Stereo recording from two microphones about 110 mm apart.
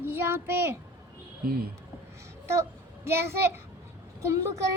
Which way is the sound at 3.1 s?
20° right (ahead or behind).